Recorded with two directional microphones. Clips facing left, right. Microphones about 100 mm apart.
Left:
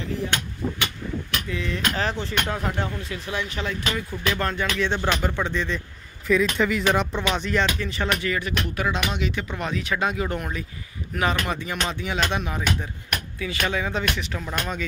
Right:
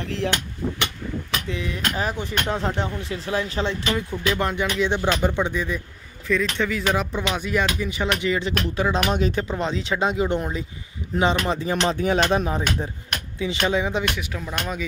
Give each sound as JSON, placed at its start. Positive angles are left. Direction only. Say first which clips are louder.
{"t": 0.0, "sound": "speech", "louder": "right 2 dB", "side_deg": -90}
{"t": 1.5, "sound": "speech", "louder": "left 1 dB", "side_deg": -15}
{"t": 4.4, "sound": "music", "louder": "right 2 dB", "side_deg": -15}
{"t": 6.2, "sound": "speech", "louder": "left 2 dB", "side_deg": 5}
{"t": 8.2, "sound": "speech", "louder": "right 3 dB", "side_deg": -20}
{"t": 9.1, "sound": "speech", "louder": "right 5 dB", "side_deg": -40}
{"t": 13.4, "sound": "speech", "louder": "right 5 dB", "side_deg": -20}
{"t": 14.3, "sound": "speech", "louder": "even", "side_deg": -5}